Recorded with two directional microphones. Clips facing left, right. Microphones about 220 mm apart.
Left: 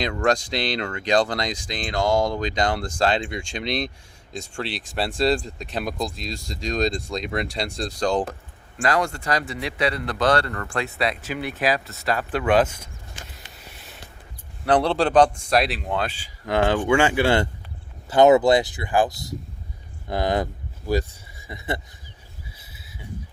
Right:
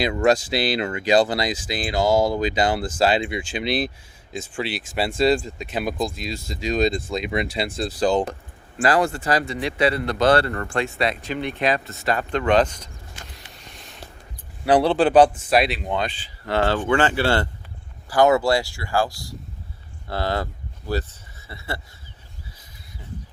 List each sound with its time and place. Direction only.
0.0 s speech: 10° right (ahead or behind)
10.2 s speech: 25° right (ahead or behind)
10.8 s speech: centre (ahead or behind)
13.6 s a sound: 5° left (ahead or behind)
14.6 s speech: 5° right (ahead or behind); by 21.8 s 15° left (ahead or behind)
22.4 s a sound: 10° left (ahead or behind)